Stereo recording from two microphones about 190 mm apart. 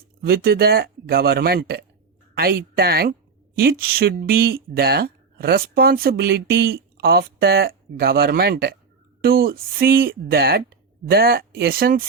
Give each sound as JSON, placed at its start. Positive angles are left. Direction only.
{"t": 0.2, "sound": "speech", "side_deg": -55}